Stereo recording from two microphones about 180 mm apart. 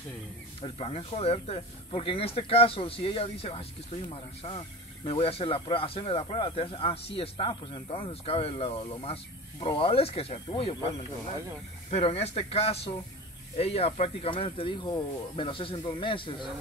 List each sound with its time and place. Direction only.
0.6 s speech: 30° left (ahead or behind)